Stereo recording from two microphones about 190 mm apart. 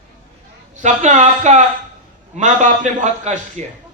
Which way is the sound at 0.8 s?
40° right (ahead or behind).